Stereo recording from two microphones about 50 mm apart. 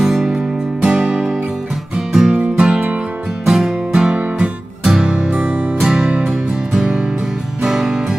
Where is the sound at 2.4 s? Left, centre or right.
Right.